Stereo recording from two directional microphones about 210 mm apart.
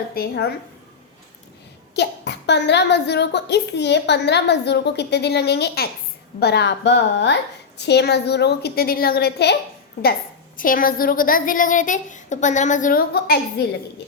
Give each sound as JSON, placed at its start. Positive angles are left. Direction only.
{"t": 0.1, "sound": "a child's voice", "side_deg": 50}
{"t": 2.0, "sound": "a child's voice", "side_deg": 55}
{"t": 10.6, "sound": "a woman's voice", "side_deg": 40}